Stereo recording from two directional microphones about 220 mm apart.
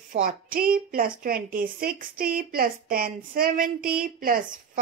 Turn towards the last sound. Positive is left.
turn(degrees=-40)  # may be behind; listen again after turning